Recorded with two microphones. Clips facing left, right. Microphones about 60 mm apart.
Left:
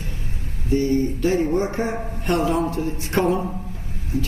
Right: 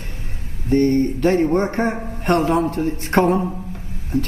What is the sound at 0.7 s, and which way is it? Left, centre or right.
A man's voice, right.